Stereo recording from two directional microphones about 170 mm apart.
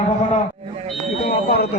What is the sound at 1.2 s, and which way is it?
Speech, 65° left (ahead or behind).